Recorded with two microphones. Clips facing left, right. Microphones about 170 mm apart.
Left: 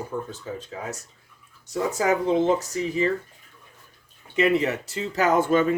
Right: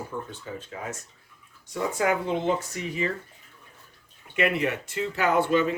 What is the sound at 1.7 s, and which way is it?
Speech, 40° left (ahead or behind).